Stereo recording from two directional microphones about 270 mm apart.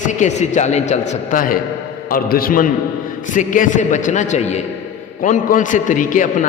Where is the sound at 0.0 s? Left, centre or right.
Left.